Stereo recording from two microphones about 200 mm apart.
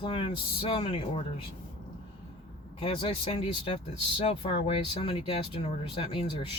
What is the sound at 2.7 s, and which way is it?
Speech, 30° left (ahead or behind).